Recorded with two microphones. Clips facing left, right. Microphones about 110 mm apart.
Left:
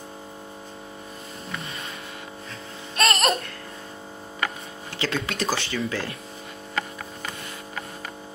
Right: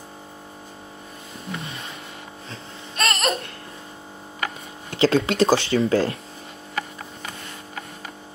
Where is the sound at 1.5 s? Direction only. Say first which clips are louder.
Right 3 dB; 30° right (ahead or behind).